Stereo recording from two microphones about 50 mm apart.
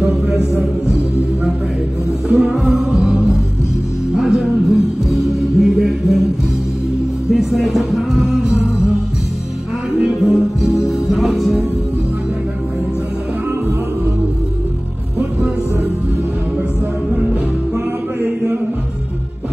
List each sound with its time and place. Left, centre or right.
0.0 s a sound: centre
2.3 s music: centre
7.2 s music: centre
10.0 s music: centre
15.1 s music: right